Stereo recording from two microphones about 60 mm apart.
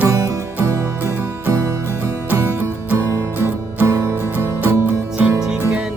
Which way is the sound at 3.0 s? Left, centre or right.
Right.